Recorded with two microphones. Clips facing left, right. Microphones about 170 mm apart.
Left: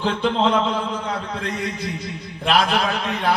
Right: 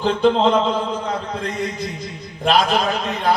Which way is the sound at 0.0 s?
40° right (ahead or behind).